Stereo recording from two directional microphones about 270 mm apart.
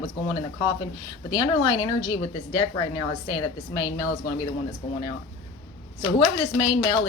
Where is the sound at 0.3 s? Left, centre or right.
Centre.